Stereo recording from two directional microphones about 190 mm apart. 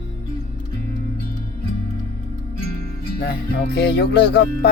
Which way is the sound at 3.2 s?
60° left (ahead or behind).